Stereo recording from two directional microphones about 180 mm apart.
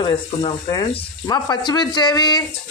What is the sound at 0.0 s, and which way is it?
Speech, 30° left (ahead or behind).